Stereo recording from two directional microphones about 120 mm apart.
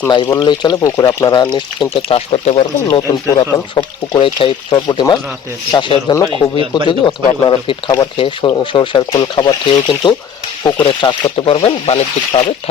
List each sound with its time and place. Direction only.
0.1 s speech: 35° left (ahead or behind)
0.9 s speech: 30° left (ahead or behind)
2.0 s speech: 55° left (ahead or behind)
2.9 s speech: 40° left (ahead or behind); by 12.4 s 60° left (ahead or behind)